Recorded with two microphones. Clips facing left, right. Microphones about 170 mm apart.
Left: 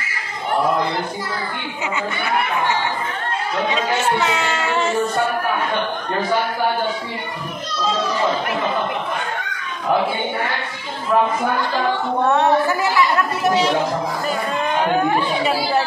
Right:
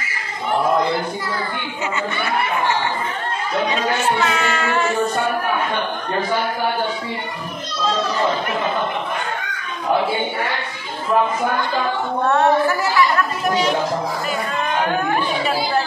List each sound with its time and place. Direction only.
3.9 s music: 20° left (ahead or behind)
12.3 s a woman's voice: 20° left (ahead or behind)
15.1 s speech: 20° left (ahead or behind)